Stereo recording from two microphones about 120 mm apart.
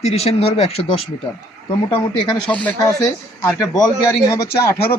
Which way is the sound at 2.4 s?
10° left (ahead or behind).